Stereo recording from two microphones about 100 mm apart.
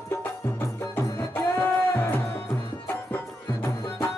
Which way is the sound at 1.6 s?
20° left (ahead or behind).